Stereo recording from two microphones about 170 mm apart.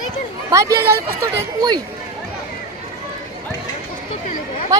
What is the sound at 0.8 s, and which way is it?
Speech, 65° right (ahead or behind).